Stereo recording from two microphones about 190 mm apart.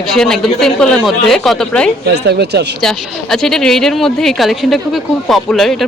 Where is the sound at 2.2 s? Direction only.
60° right (ahead or behind).